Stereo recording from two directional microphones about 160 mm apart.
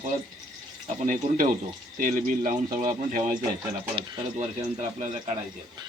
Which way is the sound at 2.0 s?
55° right (ahead or behind).